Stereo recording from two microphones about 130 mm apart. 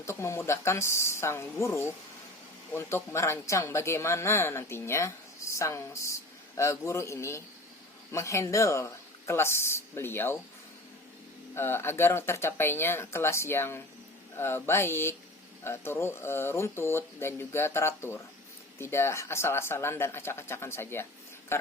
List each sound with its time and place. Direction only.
0.0 s speech: 20° left (ahead or behind)
11.5 s speech: 20° left (ahead or behind)